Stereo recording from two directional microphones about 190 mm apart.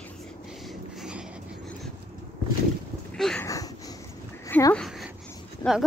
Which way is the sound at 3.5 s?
20° left (ahead or behind).